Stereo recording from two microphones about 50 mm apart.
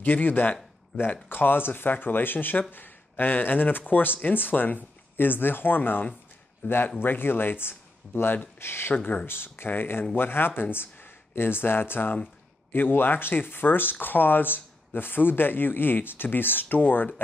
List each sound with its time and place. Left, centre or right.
0.0 s speech: left
8.9 s speech: left
9.2 s speech: left